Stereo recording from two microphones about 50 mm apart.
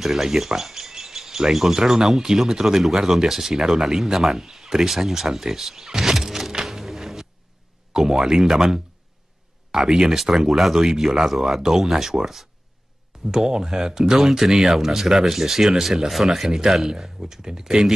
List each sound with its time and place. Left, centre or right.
0.0 s speech: centre
7.9 s speech: centre
13.3 s speech: centre